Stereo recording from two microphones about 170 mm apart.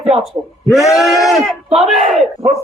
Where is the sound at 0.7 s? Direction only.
Centre (ahead or behind).